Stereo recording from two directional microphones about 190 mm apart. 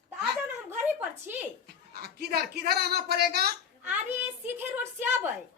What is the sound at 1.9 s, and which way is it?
Speech, 55° right (ahead or behind).